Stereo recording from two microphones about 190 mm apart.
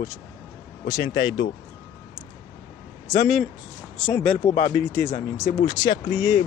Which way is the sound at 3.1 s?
15° left (ahead or behind).